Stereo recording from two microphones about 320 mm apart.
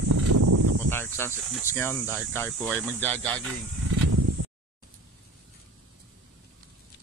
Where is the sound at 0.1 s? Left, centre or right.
Right.